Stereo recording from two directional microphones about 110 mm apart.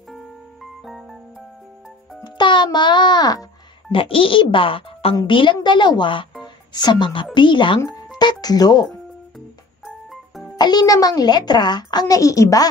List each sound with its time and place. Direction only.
2.2 s a child's voice: 45° left (ahead or behind)
3.9 s a child's voice: 55° left (ahead or behind)
6.4 s a sound: 40° left (ahead or behind)
7.3 s a child's voice: 45° left (ahead or behind)
10.6 s a child's voice: 40° left (ahead or behind)